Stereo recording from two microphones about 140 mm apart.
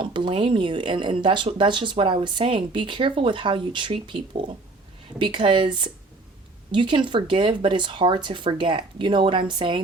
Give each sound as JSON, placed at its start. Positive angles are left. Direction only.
{"t": 0.0, "sound": "speech", "side_deg": -35}